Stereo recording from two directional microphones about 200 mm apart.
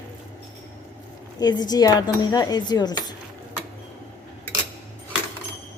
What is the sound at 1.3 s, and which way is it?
Speech, 20° left (ahead or behind).